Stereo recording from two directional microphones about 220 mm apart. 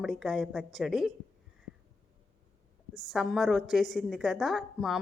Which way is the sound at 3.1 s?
Centre (ahead or behind).